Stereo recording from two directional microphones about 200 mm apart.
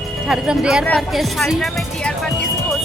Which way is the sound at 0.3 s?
5° right (ahead or behind).